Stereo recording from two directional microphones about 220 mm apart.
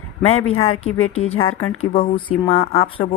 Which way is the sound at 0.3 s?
75° left (ahead or behind).